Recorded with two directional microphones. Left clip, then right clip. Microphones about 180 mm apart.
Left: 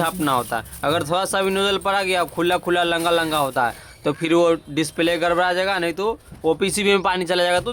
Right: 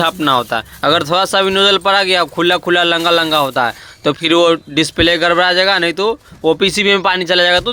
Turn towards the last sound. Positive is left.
turn(degrees=-20)  # may be behind; listen again after turning